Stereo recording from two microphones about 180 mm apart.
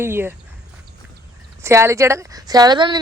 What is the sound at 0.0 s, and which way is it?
Speech, 15° right (ahead or behind).